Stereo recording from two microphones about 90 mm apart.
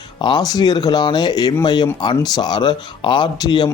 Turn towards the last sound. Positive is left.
turn(degrees=50)  # may be behind; listen again after turning